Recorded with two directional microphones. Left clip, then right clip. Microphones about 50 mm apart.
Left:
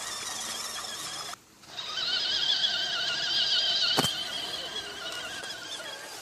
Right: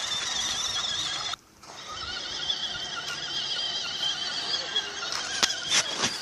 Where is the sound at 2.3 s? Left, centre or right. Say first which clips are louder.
Left 2 dB; left.